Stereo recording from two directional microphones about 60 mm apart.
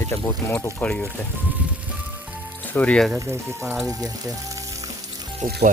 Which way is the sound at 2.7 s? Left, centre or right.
Left.